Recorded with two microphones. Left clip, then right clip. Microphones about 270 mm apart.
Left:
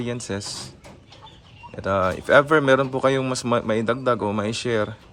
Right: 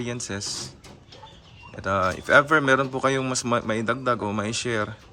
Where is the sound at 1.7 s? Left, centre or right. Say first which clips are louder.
Left 2 dB; centre.